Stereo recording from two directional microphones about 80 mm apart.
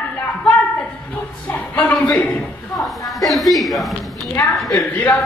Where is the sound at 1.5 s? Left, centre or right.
Centre.